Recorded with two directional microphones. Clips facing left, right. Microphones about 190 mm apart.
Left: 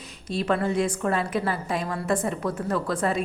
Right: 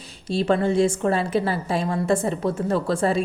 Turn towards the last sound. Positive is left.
turn(degrees=-30)  # may be behind; listen again after turning